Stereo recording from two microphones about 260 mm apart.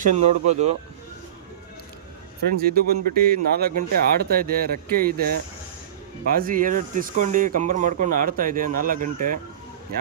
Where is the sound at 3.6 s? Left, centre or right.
Right.